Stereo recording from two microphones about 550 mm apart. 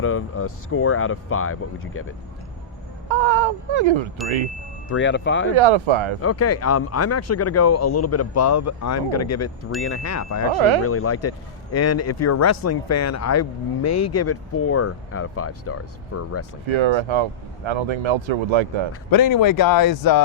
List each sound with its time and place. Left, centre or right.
0.0 s speech: left
3.1 s speech: right
4.9 s speech: centre
5.5 s speech: right
6.2 s speech: left
10.5 s speech: right
10.8 s speech: left
16.6 s speech: right
19.1 s speech: left